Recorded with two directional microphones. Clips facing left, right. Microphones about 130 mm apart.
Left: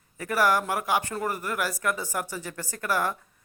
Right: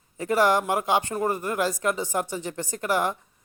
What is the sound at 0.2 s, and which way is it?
Speech, 20° right (ahead or behind).